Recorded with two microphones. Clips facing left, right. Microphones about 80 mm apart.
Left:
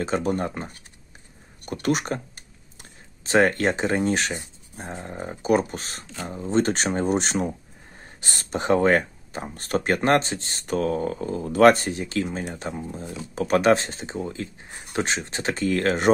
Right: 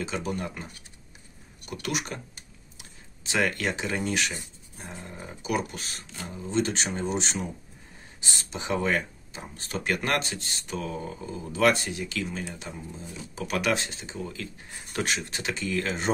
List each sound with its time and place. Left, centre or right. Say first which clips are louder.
0.0 s speech: left 7 dB; left
10.6 s speech: left 11 dB; left
12.4 s speech: left 7 dB; left
13.3 s speech: left 9 dB; left